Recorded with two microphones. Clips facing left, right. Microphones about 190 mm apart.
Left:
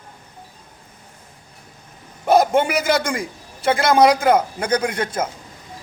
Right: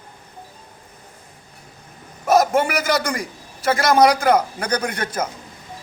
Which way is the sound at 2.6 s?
25° left (ahead or behind).